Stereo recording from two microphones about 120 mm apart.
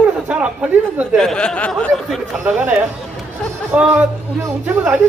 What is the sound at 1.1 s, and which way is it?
Speech, centre (ahead or behind).